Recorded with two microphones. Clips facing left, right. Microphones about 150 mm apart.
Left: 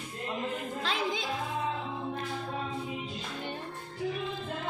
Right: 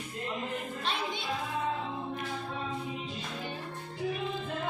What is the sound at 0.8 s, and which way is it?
Music, 90° left.